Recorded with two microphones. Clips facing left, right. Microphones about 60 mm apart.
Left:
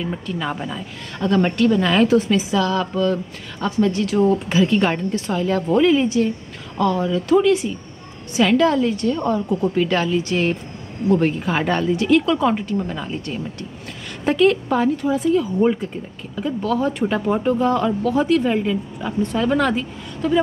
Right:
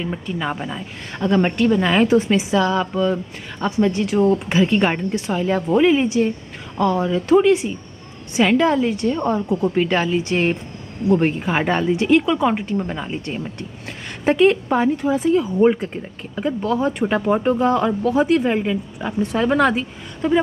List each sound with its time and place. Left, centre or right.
0.0 s a woman's voice: centre
4.5 s a woman's voice: right
8.4 s a woman's voice: centre
15.3 s speech: right
16.7 s a woman's voice: centre
17.1 s a woman's voice: right